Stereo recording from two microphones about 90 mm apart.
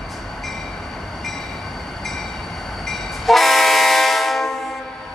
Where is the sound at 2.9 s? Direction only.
Centre (ahead or behind).